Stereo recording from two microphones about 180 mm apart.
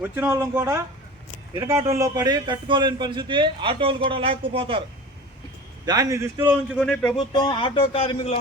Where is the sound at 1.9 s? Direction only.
20° right (ahead or behind).